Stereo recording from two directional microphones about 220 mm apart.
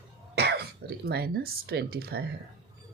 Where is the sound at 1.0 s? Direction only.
45° right (ahead or behind).